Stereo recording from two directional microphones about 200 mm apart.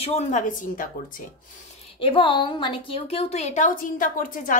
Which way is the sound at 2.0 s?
25° left (ahead or behind).